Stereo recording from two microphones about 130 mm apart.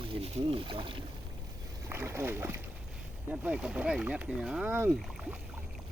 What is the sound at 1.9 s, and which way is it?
Speech, 15° right (ahead or behind).